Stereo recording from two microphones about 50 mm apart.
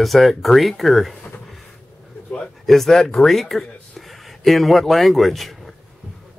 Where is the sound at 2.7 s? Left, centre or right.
Centre.